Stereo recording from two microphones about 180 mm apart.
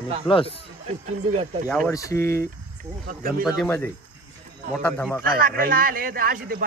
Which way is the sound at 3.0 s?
55° right (ahead or behind).